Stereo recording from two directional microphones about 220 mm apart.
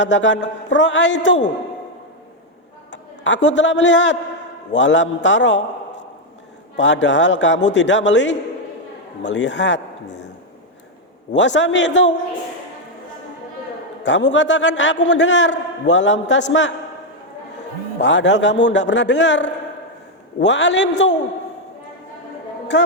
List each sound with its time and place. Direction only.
0.0 s a man's voice: 55° left (ahead or behind)
2.9 s a man's voice: 55° left (ahead or behind)
11.3 s a man's voice: 55° left (ahead or behind)
14.0 s a man's voice: 55° left (ahead or behind)
18.0 s a man's voice: 55° left (ahead or behind)
22.7 s a man's voice: 50° left (ahead or behind)